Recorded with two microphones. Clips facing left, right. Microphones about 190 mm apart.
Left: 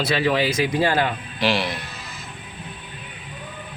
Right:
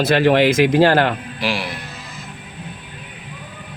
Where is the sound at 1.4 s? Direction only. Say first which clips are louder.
Left 1 dB; 10° right (ahead or behind).